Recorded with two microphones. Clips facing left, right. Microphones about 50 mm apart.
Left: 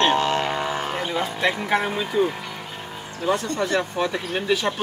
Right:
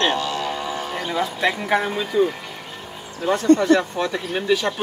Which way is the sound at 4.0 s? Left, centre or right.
Centre.